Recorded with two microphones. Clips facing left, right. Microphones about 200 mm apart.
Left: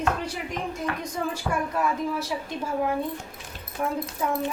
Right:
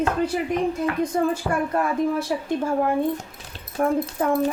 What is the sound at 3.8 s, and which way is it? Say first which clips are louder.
Speech: right 6 dB; 55° right (ahead or behind).